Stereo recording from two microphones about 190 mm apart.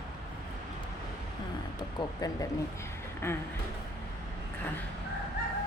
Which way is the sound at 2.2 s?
15° left (ahead or behind).